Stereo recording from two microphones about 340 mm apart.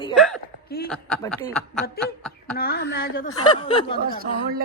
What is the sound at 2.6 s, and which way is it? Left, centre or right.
Speech, left.